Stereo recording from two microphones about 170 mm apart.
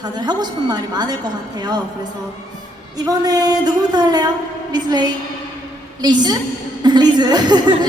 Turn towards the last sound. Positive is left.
turn(degrees=-25)  # may be behind; listen again after turning